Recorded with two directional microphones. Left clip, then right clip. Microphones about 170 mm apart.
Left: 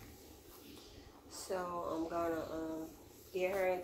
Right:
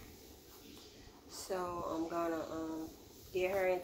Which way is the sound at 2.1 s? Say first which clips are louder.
Even; 25° right (ahead or behind).